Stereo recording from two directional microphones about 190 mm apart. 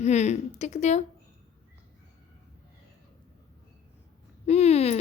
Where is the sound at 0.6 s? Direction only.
35° left (ahead or behind).